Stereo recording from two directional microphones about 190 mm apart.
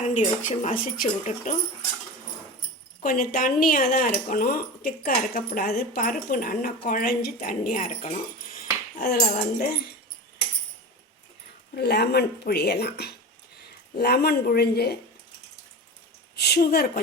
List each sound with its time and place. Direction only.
0.1 s speech: 40° left (ahead or behind)
3.0 s speech: 45° left (ahead or behind)
9.0 s speech: 55° left (ahead or behind)
11.7 s speech: 60° left (ahead or behind)
16.3 s speech: 60° left (ahead or behind)